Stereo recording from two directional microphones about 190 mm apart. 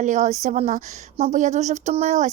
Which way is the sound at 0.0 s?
40° right (ahead or behind).